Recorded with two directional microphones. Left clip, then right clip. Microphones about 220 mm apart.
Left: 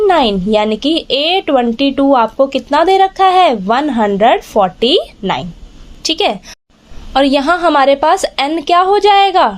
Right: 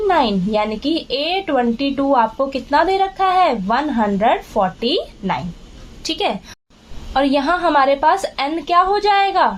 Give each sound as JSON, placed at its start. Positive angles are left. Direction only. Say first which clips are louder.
{"t": 0.1, "sound": "a woman's voice", "louder": "left 5 dB", "side_deg": 40}